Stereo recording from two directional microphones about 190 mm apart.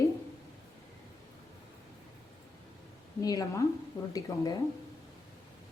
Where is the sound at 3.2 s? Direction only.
20° left (ahead or behind).